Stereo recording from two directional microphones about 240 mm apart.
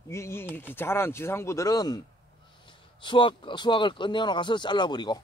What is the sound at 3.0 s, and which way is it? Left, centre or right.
Speech, centre.